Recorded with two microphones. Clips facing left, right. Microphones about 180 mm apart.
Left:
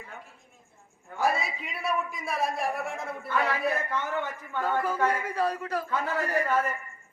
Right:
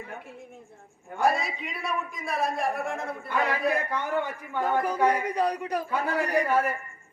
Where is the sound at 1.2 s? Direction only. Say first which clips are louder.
Right 2 dB; centre (ahead or behind).